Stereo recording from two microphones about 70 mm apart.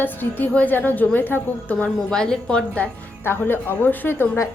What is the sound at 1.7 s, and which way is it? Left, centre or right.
A woman's voice, centre.